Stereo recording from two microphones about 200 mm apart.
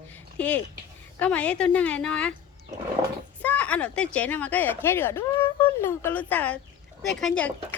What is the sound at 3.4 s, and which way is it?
Speech, 5° left (ahead or behind).